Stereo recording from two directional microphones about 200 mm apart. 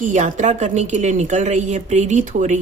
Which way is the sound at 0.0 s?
40° right (ahead or behind).